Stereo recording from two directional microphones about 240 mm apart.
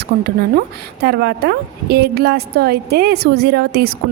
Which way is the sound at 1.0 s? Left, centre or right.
Right.